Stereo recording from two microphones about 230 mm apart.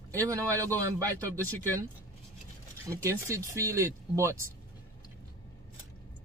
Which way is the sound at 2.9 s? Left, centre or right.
Centre.